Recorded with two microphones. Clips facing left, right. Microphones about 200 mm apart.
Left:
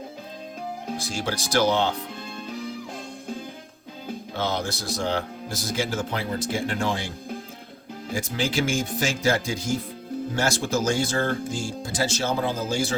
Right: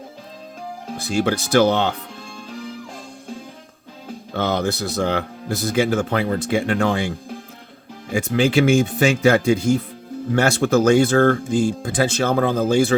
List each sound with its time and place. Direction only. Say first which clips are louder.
1.0 s speech: right 13 dB; 60° right (ahead or behind)
4.4 s speech: right 7 dB; 60° right (ahead or behind)
8.1 s speech: right 9 dB; 60° right (ahead or behind)